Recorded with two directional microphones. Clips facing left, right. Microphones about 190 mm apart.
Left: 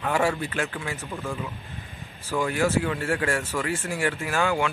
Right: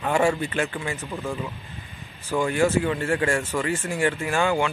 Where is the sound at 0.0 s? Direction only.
Centre (ahead or behind).